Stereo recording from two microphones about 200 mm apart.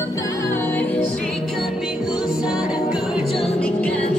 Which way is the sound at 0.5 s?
10° left (ahead or behind).